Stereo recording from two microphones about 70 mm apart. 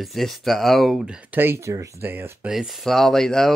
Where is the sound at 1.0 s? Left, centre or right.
Centre.